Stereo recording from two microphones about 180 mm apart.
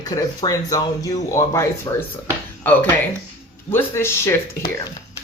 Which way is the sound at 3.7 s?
15° left (ahead or behind).